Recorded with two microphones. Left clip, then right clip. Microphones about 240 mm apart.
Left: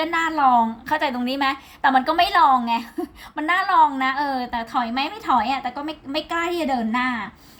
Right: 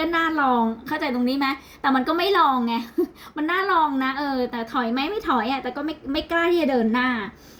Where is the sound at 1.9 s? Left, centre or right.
Left.